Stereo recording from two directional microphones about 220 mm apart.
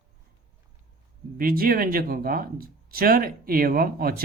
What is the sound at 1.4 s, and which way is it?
Speech, 40° right (ahead or behind).